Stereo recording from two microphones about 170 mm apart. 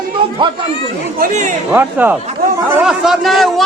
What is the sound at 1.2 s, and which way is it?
Speech, 45° right (ahead or behind).